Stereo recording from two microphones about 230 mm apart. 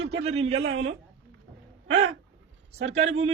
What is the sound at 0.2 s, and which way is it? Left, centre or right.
Speech, right.